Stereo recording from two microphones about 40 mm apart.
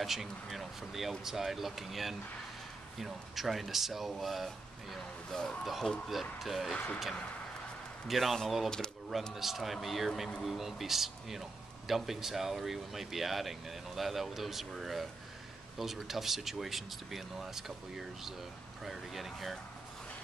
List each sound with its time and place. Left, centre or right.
0.0 s speech: centre
5.3 s speech: centre
5.6 s speech: centre
8.1 s speech: centre
8.6 s speech: centre
9.3 s speech: centre